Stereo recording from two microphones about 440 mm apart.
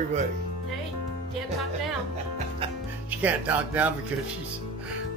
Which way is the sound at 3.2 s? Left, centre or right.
Centre.